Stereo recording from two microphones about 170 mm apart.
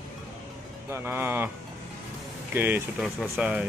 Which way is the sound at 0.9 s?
15° right (ahead or behind).